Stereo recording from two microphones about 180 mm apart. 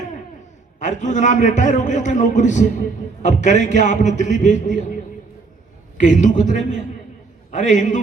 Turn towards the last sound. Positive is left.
turn(degrees=45)  # may be behind; listen again after turning